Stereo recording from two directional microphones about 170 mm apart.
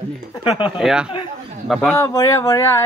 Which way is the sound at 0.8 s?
5° right (ahead or behind).